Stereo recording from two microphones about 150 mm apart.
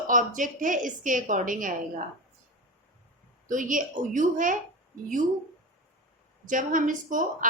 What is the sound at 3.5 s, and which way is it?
A woman's voice, 65° right (ahead or behind).